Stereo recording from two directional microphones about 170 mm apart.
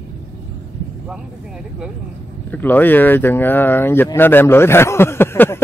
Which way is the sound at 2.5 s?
10° left (ahead or behind).